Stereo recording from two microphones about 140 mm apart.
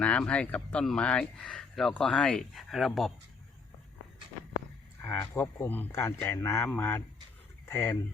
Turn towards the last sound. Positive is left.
turn(degrees=15)  # may be behind; listen again after turning